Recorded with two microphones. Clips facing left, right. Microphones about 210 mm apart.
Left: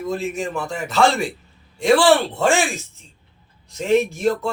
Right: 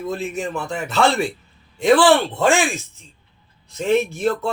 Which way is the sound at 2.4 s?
Centre (ahead or behind).